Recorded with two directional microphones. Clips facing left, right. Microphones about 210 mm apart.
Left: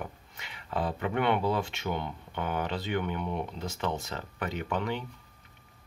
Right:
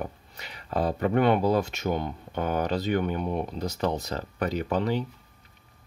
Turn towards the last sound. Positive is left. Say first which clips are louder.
# right 6 dB
turn(degrees=-35)  # may be behind; listen again after turning